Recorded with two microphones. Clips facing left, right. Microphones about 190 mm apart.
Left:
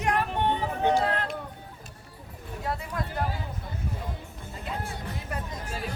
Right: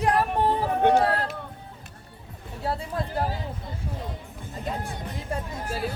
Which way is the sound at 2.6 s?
30° right (ahead or behind).